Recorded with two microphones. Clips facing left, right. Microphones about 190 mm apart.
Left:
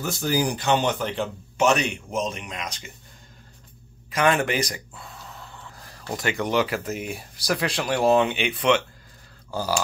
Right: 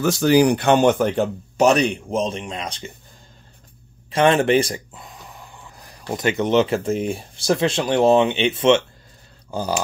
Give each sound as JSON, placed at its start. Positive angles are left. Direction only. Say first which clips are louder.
{"t": 0.0, "sound": "speech", "louder": "right 9 dB", "side_deg": -85}
{"t": 4.1, "sound": "speech", "louder": "right 6 dB", "side_deg": -30}